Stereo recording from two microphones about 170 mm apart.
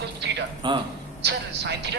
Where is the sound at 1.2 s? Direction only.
80° right.